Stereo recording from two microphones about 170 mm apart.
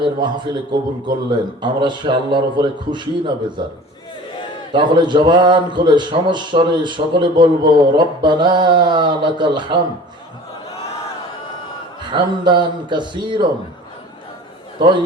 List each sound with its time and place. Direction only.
0.0 s a man's voice: 25° right (ahead or behind)
4.7 s a man's voice: 25° right (ahead or behind)
12.1 s a man's voice: 25° right (ahead or behind)